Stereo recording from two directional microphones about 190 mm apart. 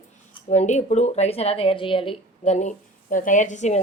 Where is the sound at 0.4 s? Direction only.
40° left (ahead or behind).